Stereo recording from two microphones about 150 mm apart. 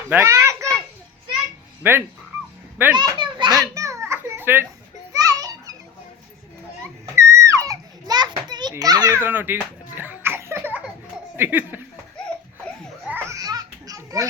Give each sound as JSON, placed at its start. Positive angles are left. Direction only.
{"t": 0.1, "sound": "children playing", "side_deg": -20}
{"t": 1.8, "sound": "speech", "side_deg": -15}
{"t": 2.9, "sound": "children playing", "side_deg": -30}
{"t": 7.0, "sound": "children playing", "side_deg": -20}
{"t": 8.7, "sound": "a child's voice", "side_deg": -25}
{"t": 9.2, "sound": "a sound", "side_deg": -15}
{"t": 11.3, "sound": "speech", "side_deg": -15}
{"t": 13.1, "sound": "a sound", "side_deg": -15}